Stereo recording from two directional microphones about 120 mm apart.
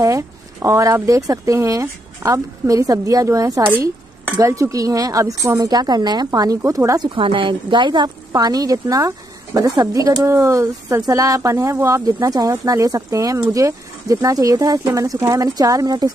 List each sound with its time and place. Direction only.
0.0 s a woman's voice: 25° right (ahead or behind)
7.1 s a woman's voice: 45° right (ahead or behind)